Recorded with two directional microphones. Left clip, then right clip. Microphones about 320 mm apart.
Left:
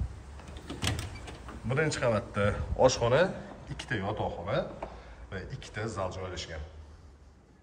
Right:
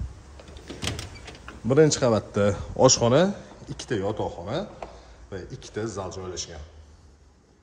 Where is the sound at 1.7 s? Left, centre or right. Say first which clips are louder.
Right 9 dB; centre.